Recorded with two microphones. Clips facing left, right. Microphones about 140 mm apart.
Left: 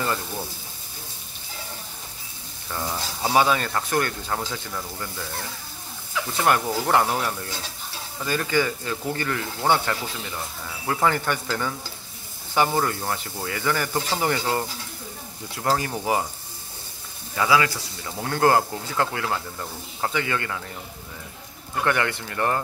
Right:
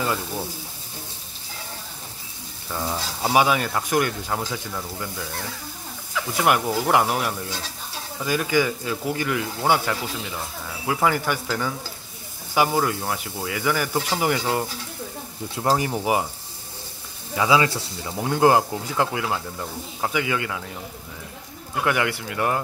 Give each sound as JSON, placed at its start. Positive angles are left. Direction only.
{"t": 2.7, "sound": "speech", "side_deg": -10}
{"t": 17.4, "sound": "speech", "side_deg": -25}
{"t": 21.8, "sound": "speech", "side_deg": -10}